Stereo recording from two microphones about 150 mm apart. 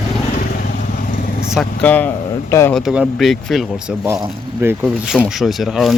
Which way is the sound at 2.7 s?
5° right (ahead or behind).